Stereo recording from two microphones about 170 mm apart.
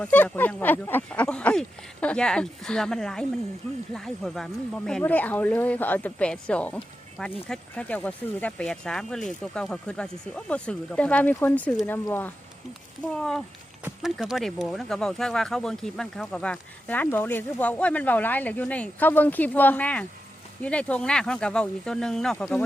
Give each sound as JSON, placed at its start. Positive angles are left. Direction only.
{"t": 0.0, "sound": "speech", "side_deg": 10}